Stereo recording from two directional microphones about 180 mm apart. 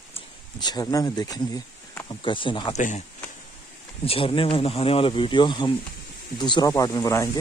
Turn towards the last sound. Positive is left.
turn(degrees=20)  # may be behind; listen again after turning